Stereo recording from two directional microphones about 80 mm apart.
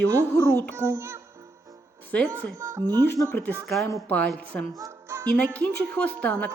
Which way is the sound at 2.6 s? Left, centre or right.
Right.